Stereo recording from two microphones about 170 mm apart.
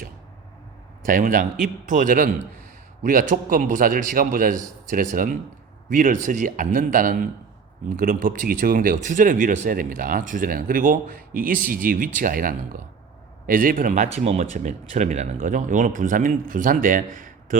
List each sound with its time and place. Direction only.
1.0 s speech: 55° right (ahead or behind)